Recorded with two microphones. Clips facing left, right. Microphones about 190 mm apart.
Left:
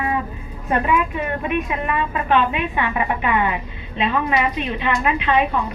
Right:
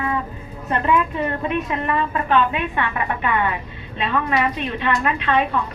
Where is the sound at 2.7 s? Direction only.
10° left (ahead or behind).